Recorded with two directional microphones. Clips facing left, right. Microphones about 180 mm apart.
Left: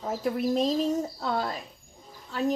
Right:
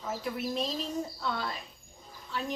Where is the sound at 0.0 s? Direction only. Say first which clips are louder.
Left 7 dB; 40° left (ahead or behind).